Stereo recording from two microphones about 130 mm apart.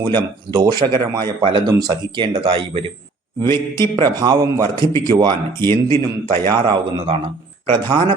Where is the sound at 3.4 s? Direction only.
20° left (ahead or behind).